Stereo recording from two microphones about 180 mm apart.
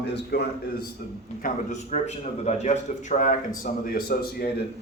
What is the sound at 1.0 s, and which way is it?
A man's voice, 55° left (ahead or behind).